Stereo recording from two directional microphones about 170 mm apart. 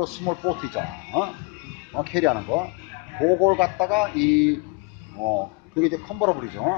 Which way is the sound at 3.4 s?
5° right (ahead or behind).